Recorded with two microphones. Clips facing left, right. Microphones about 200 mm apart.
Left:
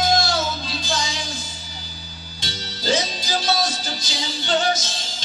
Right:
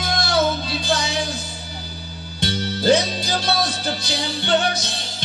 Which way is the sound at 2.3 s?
60° right (ahead or behind).